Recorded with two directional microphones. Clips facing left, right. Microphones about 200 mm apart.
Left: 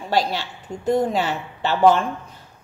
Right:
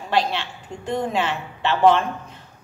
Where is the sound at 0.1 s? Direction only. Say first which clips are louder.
Even; 40° left (ahead or behind).